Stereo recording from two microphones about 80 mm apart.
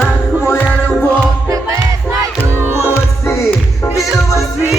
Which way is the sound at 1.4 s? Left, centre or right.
Right.